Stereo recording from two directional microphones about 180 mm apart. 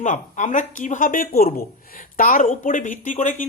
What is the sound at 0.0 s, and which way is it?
Speech, 45° left (ahead or behind).